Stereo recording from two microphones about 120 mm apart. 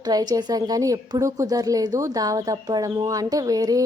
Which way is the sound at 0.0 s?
35° right (ahead or behind).